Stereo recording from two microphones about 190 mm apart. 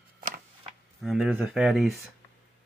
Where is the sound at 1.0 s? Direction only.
Centre (ahead or behind).